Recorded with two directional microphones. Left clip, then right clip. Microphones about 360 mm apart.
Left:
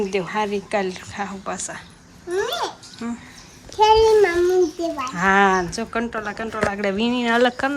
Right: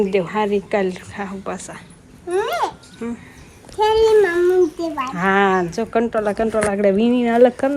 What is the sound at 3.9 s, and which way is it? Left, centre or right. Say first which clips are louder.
Speech: right 1 dB; right.